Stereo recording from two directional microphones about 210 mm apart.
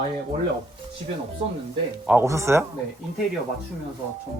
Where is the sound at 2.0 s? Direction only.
10° right (ahead or behind).